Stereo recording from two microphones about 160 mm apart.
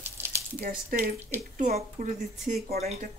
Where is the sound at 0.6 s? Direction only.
60° right (ahead or behind).